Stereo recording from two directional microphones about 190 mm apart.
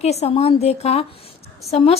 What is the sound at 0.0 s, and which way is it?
A woman's voice, 35° left (ahead or behind).